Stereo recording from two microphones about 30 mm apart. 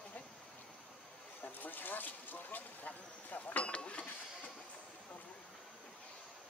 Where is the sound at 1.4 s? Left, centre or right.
Left.